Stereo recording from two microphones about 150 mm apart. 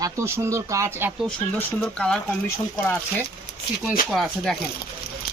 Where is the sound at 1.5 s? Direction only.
10° left (ahead or behind).